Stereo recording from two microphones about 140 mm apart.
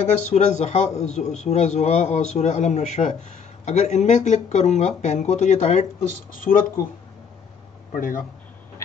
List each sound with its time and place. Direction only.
0.3 s a man's voice: 55° left (ahead or behind)
6.3 s speech: 80° left
7.9 s speech: 75° left (ahead or behind)